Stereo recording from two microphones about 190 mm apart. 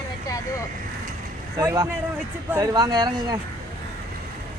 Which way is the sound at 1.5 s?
20° right (ahead or behind).